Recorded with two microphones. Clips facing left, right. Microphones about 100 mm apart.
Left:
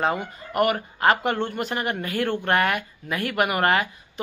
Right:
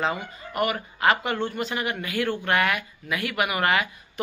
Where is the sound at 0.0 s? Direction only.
50° left (ahead or behind).